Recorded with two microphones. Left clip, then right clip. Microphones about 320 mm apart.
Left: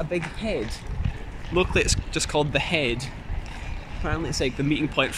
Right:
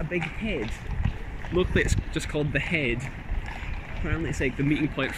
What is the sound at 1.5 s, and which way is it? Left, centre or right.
Speech, centre.